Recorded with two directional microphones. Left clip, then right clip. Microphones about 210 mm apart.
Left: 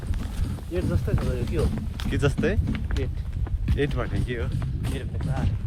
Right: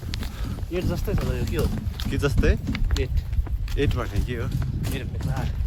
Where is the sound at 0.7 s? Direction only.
50° right (ahead or behind).